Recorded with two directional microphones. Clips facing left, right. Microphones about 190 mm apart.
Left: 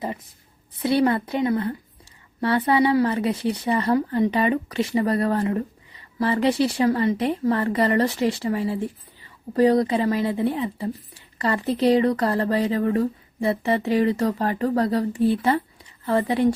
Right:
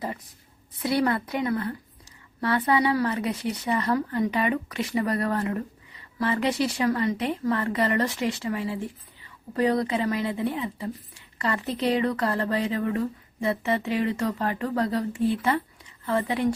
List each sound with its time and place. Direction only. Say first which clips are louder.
0.8 s a woman's voice: left 4 dB; 25° left (ahead or behind)